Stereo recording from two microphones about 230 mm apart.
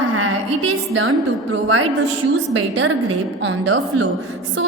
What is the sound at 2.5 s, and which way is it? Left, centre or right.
A woman's voice, right.